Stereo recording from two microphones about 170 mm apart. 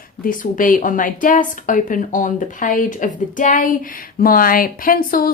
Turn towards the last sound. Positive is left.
turn(degrees=55)  # may be behind; listen again after turning